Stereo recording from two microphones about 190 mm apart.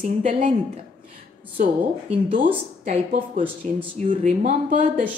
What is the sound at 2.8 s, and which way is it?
Speech, 45° right (ahead or behind).